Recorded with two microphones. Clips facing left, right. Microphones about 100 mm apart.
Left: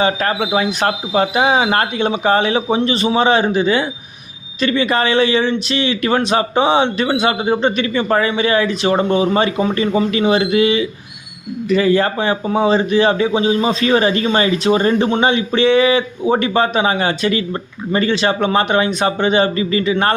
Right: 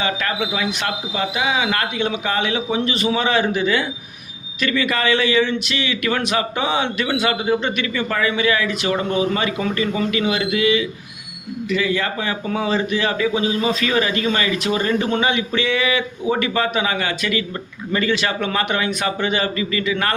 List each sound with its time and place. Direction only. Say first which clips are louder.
0.0 s a man's voice: left 6 dB; 35° left (ahead or behind)